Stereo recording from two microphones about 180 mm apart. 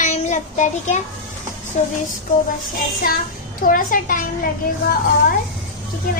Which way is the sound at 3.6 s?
50° left (ahead or behind).